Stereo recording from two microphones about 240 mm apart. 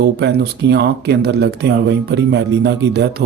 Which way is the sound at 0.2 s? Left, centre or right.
Right.